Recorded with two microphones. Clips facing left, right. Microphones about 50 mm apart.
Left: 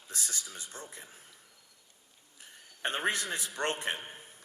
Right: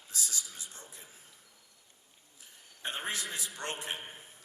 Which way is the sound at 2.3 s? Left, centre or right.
Left.